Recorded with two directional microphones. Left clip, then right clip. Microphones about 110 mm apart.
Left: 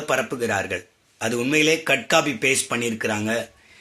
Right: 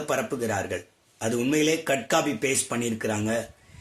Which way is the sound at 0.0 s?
15° left (ahead or behind).